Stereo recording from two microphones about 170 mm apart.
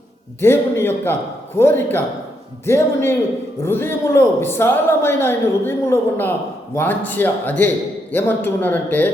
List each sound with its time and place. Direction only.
0.4 s a man's voice: 15° left (ahead or behind)